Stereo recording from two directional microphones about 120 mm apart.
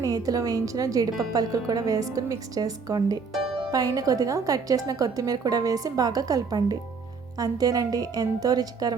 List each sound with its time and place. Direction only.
0.0 s a woman's voice: 30° right (ahead or behind)